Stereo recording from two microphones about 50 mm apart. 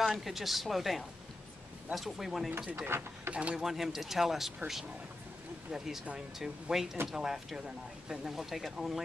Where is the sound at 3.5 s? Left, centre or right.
Centre.